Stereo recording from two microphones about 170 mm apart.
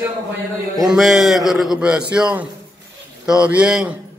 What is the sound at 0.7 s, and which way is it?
A man's voice, centre (ahead or behind).